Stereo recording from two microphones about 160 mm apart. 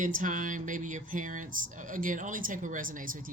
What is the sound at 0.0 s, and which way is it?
Speech, 55° right (ahead or behind).